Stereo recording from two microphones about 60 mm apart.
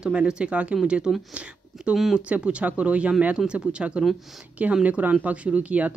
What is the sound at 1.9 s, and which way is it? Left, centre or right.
Speech, centre.